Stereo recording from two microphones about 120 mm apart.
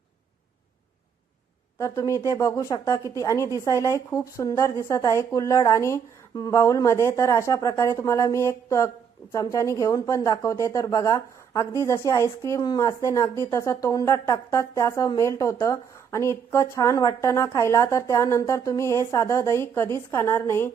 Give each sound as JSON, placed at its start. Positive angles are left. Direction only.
{"t": 1.8, "sound": "a woman's voice", "side_deg": 25}